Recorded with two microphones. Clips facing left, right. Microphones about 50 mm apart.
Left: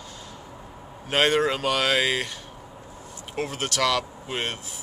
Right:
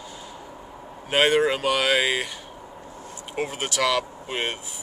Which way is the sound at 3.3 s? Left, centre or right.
Centre.